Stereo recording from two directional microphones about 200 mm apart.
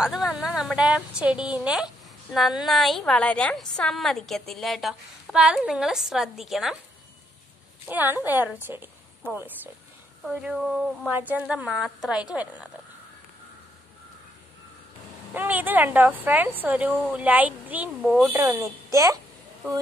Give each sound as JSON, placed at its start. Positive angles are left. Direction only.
{"t": 0.0, "sound": "a woman's voice", "side_deg": 0}
{"t": 7.9, "sound": "a woman's voice", "side_deg": -10}
{"t": 15.3, "sound": "speech", "side_deg": -10}
{"t": 18.3, "sound": "speech", "side_deg": -15}